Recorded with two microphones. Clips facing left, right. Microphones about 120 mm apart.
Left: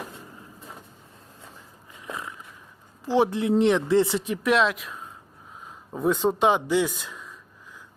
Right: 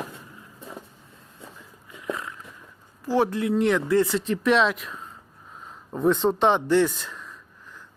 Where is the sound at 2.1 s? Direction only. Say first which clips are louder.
Right 1 dB; 20° left (ahead or behind).